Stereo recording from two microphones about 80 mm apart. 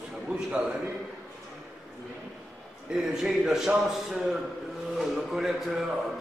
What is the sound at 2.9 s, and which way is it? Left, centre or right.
A man's voice, centre.